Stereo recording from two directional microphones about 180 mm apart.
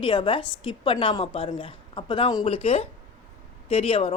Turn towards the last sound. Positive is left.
turn(degrees=30)  # may be behind; listen again after turning